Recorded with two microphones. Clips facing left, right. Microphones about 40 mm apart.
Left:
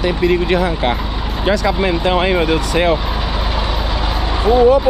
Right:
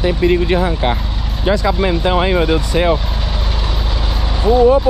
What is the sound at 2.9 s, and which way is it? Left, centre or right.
Vehicle, centre.